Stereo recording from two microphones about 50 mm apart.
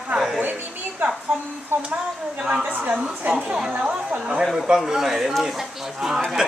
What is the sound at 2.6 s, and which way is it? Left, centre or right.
Speech, right.